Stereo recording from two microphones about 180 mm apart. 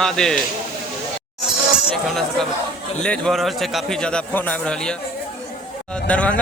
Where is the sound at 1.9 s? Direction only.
Centre (ahead or behind).